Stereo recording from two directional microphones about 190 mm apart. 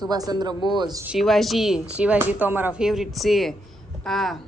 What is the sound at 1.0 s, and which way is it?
Speech, centre (ahead or behind).